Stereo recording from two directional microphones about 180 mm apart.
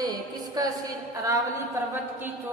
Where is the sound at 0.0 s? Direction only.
20° right (ahead or behind).